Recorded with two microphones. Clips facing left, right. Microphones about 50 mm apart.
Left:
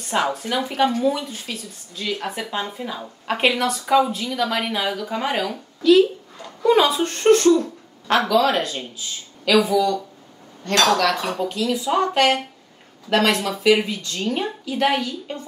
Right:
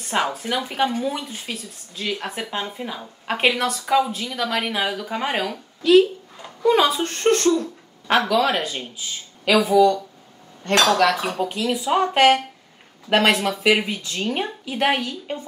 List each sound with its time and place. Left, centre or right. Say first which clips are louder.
0.1 s a woman's voice: left 1 dB; centre
6.6 s speech: left 1 dB; centre
7.6 s speech: even; centre
9.5 s speech: left 1 dB; centre
11.0 s speech: right 2 dB; centre
14.0 s speech: left 1 dB; right